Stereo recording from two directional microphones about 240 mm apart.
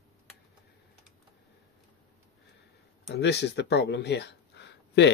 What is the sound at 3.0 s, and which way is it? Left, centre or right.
Speech, left.